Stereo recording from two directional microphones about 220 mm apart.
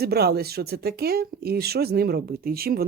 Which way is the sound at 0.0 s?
45° right (ahead or behind).